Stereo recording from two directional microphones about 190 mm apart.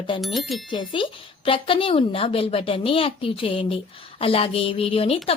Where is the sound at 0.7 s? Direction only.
25° left (ahead or behind).